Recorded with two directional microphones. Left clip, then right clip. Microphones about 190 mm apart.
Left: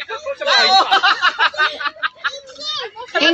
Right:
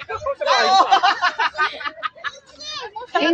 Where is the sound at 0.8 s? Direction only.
65° right (ahead or behind).